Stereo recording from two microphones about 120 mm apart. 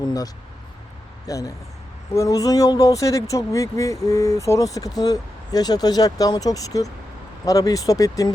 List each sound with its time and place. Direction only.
1.3 s speech: 25° left (ahead or behind)